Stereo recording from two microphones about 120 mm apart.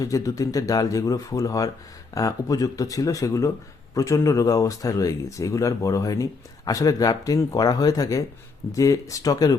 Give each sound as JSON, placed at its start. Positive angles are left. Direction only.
{"t": 0.0, "sound": "speech", "side_deg": 30}